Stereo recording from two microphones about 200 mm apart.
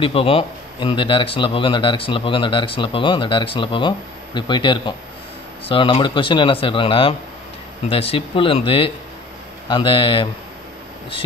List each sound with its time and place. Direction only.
0.0 s a man's voice: 30° left (ahead or behind)